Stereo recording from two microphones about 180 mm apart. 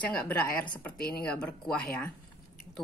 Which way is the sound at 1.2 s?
5° left (ahead or behind).